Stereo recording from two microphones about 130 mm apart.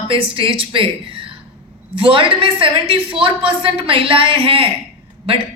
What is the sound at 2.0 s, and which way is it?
Speech, 45° right (ahead or behind).